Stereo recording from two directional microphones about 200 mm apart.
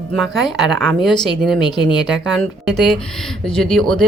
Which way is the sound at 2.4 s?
Centre (ahead or behind).